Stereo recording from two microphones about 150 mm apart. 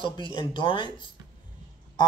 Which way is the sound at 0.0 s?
35° left (ahead or behind).